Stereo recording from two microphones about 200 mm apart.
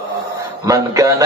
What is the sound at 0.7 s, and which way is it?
Music, 15° right (ahead or behind).